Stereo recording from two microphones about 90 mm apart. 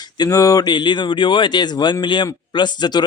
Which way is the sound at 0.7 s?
60° left (ahead or behind).